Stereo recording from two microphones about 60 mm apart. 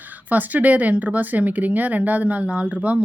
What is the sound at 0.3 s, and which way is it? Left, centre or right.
Speech, right.